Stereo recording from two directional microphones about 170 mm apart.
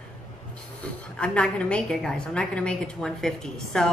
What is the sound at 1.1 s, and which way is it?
A woman's voice, 5° left (ahead or behind).